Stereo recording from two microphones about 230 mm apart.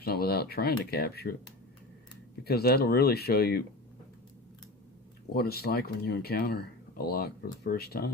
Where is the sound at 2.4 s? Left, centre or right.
Left.